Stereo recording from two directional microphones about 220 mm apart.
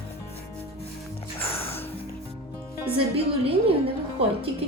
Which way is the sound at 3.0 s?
25° right (ahead or behind).